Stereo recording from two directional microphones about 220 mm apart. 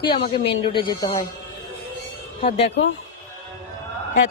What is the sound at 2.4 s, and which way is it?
Speech, 30° left (ahead or behind).